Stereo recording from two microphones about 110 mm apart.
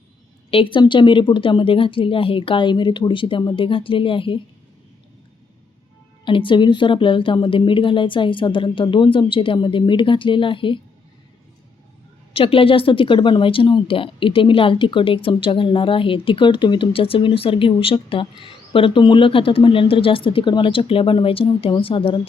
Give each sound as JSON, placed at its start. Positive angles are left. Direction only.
{"t": 0.5, "sound": "speech", "side_deg": 50}
{"t": 6.2, "sound": "speech", "side_deg": 50}
{"t": 12.3, "sound": "speech", "side_deg": 55}